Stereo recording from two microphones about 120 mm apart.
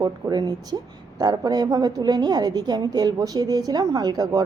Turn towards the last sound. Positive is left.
turn(degrees=-35)  # may be behind; listen again after turning